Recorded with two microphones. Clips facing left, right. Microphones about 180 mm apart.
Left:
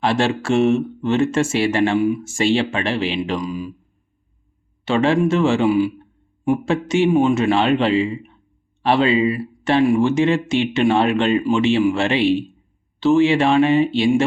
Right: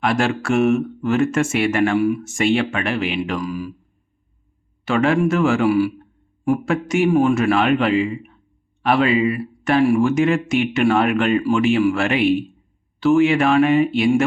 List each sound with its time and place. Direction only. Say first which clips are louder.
0.0 s speech: left 1 dB; 30° left (ahead or behind)
4.9 s speech: left 1 dB; 25° left (ahead or behind)